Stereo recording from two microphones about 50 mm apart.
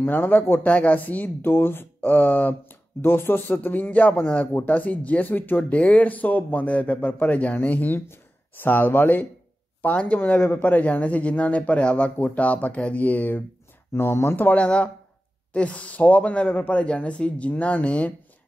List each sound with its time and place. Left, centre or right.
0.0 s a man's voice: left
0.7 s speech: left
1.4 s a man's voice: left
3.0 s a man's voice: left
9.9 s speech: left
10.4 s speech: left
13.9 s a man's voice: left
14.3 s speech: left